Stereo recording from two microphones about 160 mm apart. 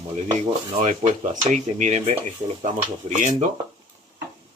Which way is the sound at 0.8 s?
45° right (ahead or behind).